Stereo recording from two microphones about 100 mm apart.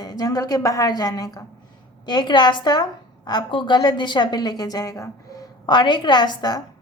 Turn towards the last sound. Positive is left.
turn(degrees=45)  # may be behind; listen again after turning